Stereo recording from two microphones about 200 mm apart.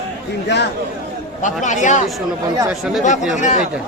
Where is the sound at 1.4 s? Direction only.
40° left (ahead or behind).